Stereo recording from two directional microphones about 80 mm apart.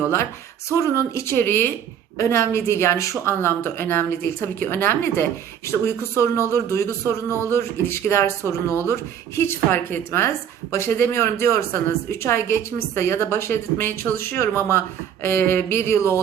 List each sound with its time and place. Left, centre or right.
0.7 s speech: left